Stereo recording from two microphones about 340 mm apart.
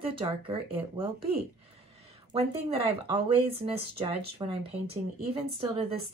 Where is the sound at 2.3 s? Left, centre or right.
Centre.